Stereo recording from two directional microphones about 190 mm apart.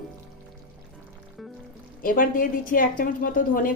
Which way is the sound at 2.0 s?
45° left (ahead or behind).